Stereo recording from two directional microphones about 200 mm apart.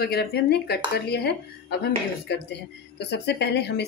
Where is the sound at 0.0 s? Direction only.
55° left (ahead or behind).